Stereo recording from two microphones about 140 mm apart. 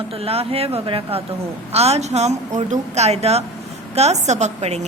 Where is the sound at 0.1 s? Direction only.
45° right (ahead or behind).